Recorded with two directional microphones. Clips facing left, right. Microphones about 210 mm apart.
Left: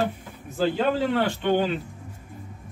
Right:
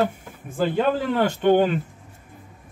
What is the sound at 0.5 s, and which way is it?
Speech, 50° right (ahead or behind).